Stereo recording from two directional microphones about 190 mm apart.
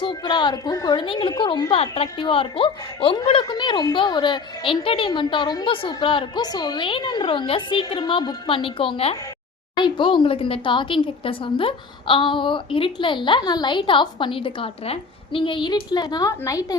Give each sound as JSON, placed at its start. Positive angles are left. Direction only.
{"t": 0.0, "sound": "a woman's voice", "side_deg": 25}